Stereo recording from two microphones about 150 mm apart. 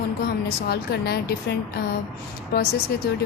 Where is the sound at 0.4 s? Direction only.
90° left.